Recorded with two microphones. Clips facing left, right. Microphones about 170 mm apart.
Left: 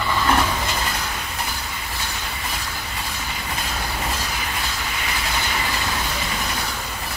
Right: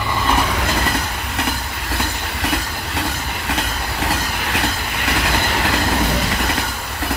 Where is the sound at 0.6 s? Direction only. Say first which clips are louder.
Right 5 dB; 60° right (ahead or behind).